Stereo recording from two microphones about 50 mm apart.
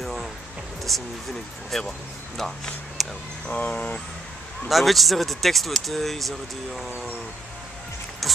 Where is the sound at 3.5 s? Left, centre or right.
Left.